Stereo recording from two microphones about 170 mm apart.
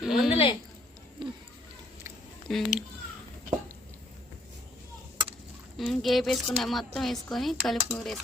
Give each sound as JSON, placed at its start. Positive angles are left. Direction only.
{"t": 0.0, "sound": "a woman's voice", "side_deg": 0}
{"t": 0.3, "sound": "a woman's voice", "side_deg": 35}
{"t": 1.2, "sound": "speech", "side_deg": -30}
{"t": 2.5, "sound": "a woman's voice", "side_deg": 0}
{"t": 5.7, "sound": "a woman's voice", "side_deg": 0}